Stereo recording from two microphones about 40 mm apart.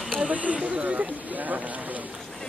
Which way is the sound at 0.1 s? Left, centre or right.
Right.